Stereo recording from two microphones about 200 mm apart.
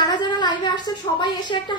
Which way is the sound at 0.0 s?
20° left (ahead or behind).